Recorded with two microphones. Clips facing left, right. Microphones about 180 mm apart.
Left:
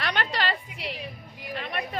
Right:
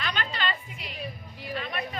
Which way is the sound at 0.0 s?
70° left (ahead or behind).